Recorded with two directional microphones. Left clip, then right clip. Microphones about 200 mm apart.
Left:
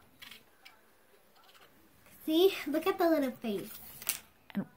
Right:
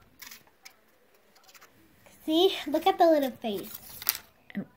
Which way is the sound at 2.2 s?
10° left (ahead or behind).